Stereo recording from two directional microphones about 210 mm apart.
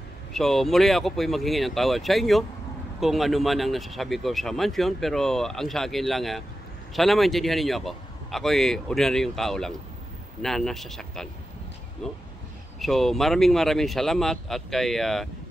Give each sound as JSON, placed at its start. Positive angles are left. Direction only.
{"t": 0.3, "sound": "speech", "side_deg": 0}